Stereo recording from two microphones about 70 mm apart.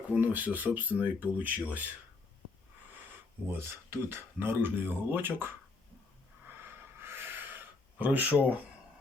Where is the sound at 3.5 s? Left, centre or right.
Right.